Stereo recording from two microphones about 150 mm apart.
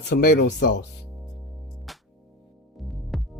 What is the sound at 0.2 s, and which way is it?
Speech, 90° left.